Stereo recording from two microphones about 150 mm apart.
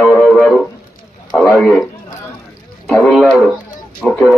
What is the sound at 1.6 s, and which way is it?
Speech, centre (ahead or behind).